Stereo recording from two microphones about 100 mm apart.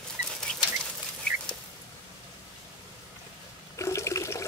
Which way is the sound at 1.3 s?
10° left (ahead or behind).